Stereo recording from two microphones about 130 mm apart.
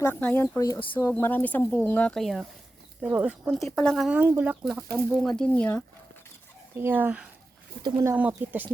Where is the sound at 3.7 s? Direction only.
5° left (ahead or behind).